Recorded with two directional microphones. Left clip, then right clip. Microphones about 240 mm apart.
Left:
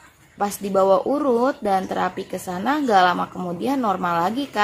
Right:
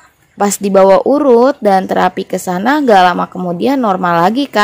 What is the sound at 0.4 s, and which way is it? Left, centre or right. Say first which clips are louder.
Speech: right 11 dB; right.